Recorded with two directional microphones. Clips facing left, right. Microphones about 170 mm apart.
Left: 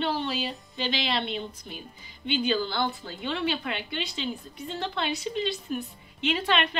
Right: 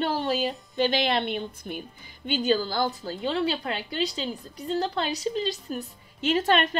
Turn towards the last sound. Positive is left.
turn(degrees=-45)  # may be behind; listen again after turning